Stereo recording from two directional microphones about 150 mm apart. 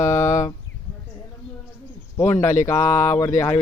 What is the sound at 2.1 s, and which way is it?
Speech, 15° left (ahead or behind).